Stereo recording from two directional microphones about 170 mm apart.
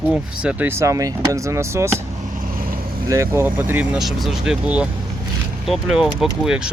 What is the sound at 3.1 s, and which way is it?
Speech, 15° right (ahead or behind).